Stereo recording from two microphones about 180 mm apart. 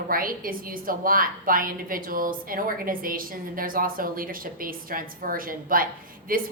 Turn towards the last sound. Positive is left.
turn(degrees=-50)  # may be behind; listen again after turning